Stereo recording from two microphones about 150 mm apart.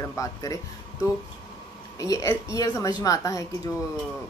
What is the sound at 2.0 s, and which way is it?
A woman's voice, 20° left (ahead or behind).